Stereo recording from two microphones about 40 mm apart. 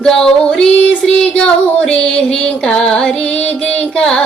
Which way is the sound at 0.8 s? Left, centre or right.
Left.